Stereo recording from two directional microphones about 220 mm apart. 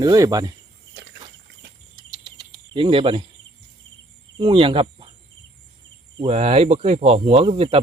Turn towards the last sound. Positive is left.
turn(degrees=-25)  # may be behind; listen again after turning